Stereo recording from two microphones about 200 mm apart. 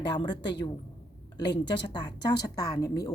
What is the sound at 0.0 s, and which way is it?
A woman's voice, 20° left (ahead or behind).